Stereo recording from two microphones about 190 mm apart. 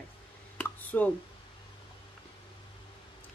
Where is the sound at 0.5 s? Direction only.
10° left (ahead or behind).